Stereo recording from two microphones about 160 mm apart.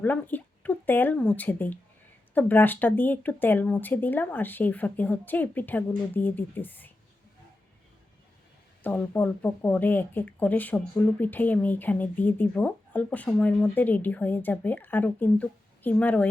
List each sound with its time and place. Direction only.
0.0 s speech: 10° left (ahead or behind)
8.8 s speech: 10° left (ahead or behind)